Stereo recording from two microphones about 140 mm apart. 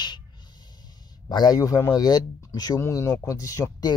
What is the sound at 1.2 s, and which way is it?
Speech, 30° left (ahead or behind).